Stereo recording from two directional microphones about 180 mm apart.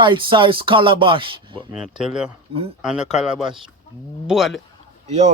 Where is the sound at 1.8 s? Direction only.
5° right (ahead or behind).